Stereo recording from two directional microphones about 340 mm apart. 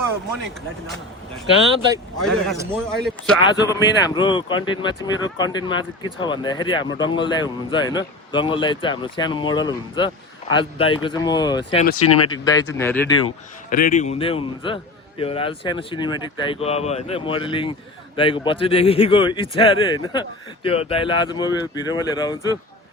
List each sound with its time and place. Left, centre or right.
2.2 s speech: centre
13.7 s a man's voice: left